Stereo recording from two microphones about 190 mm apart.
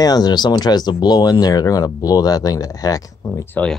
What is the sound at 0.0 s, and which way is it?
Speech, 20° left (ahead or behind).